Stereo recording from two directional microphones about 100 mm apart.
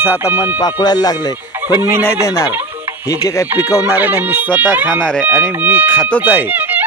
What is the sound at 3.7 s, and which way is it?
Speech, 35° left (ahead or behind).